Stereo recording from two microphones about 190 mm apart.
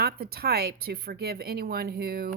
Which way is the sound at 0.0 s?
55° right (ahead or behind).